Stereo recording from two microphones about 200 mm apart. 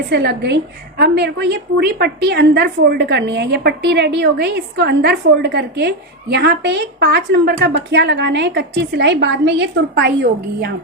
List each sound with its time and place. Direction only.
0.1 s a woman's voice: 55° right (ahead or behind)